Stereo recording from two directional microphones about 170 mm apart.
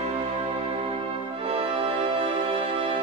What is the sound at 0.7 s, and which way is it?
Music, 35° right (ahead or behind).